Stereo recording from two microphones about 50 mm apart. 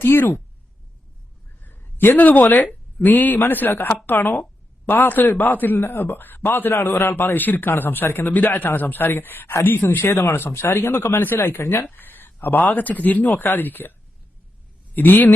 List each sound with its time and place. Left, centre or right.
0.0 s a man's voice: left
1.6 s a sound: left
2.2 s a man's voice: left
11.1 s a man's voice: left
11.6 s speech: left
11.9 s speech: left
14.9 s speech: left